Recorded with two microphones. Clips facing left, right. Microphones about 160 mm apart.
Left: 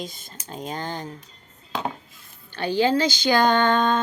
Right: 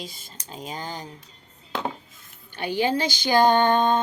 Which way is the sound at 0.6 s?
10° right (ahead or behind).